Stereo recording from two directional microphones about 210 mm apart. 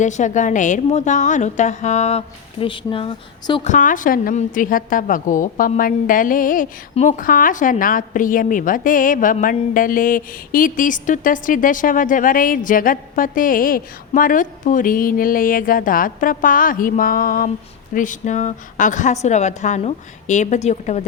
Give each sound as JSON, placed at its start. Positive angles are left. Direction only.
{"t": 0.0, "sound": "a woman's voice", "side_deg": 35}
{"t": 3.7, "sound": "a woman's voice", "side_deg": 40}